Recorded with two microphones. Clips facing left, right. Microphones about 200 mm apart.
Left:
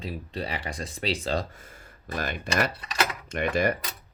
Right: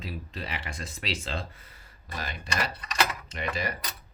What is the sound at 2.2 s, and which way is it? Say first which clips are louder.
Speech: left 6 dB; 55° left (ahead or behind).